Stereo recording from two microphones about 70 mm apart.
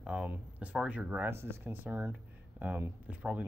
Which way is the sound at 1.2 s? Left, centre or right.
Right.